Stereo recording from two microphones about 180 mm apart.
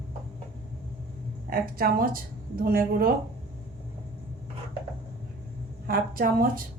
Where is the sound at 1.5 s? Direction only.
55° right (ahead or behind).